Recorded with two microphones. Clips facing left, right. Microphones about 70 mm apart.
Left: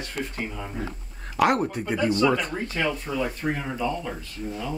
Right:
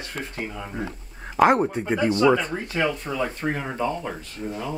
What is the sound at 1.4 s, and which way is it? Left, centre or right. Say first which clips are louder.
Speech: right 4 dB; right.